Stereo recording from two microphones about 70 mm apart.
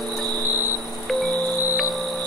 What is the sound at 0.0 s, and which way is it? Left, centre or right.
Vehicle, centre.